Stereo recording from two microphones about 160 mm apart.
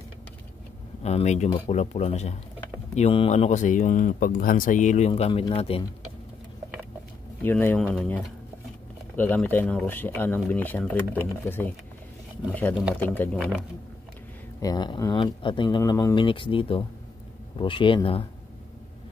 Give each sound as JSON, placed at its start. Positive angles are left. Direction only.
{"t": 1.0, "sound": "speech", "side_deg": 45}
{"t": 7.4, "sound": "speech", "side_deg": 10}
{"t": 13.0, "sound": "speech", "side_deg": 10}
{"t": 13.4, "sound": "speech", "side_deg": 0}
{"t": 14.6, "sound": "speech", "side_deg": 25}